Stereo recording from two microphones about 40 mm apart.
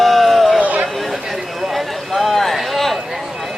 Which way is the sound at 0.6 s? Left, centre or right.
Right.